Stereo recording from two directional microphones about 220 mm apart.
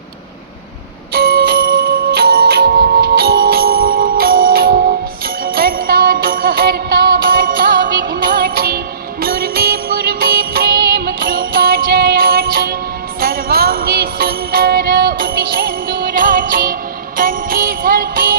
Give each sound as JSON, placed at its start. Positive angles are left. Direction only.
{"t": 1.1, "sound": "music", "side_deg": -45}